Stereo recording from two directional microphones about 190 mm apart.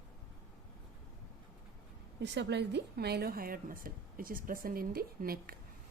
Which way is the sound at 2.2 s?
65° right (ahead or behind).